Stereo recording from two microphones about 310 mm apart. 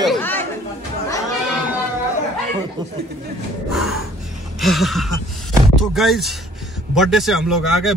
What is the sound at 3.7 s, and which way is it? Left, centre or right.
Snort, centre.